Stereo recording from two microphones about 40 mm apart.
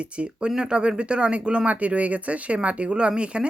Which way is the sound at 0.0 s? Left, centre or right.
Right.